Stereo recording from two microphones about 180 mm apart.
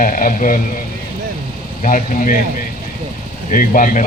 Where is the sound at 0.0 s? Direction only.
45° left (ahead or behind).